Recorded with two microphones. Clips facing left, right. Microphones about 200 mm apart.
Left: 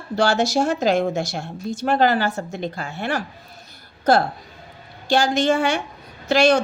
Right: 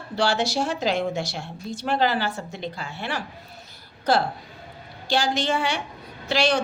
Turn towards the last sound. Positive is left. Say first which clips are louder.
# left 6 dB
turn(degrees=45)  # may be behind; listen again after turning